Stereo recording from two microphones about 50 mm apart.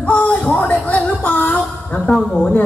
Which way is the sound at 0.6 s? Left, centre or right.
Left.